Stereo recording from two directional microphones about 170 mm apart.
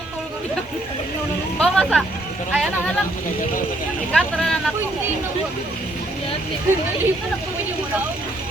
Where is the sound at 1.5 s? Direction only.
5° left (ahead or behind).